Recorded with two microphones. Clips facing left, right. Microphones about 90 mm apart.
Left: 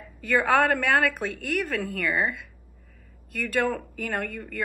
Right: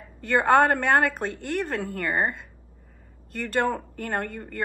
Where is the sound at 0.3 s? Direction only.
35° right (ahead or behind).